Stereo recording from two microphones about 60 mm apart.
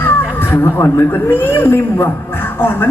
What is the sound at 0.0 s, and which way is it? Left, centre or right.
Speech, left.